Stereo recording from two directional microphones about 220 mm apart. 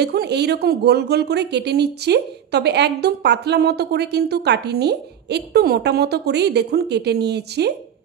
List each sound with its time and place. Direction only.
0.0 s a woman's voice: 50° right (ahead or behind)